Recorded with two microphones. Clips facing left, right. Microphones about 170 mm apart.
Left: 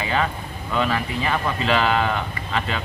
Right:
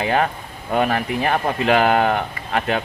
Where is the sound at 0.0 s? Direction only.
55° right (ahead or behind).